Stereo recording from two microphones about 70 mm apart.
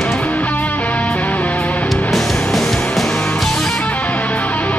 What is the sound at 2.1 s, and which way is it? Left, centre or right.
Music, centre.